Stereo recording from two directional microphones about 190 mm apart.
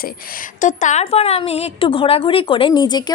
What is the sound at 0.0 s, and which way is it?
A woman's voice, 45° left (ahead or behind).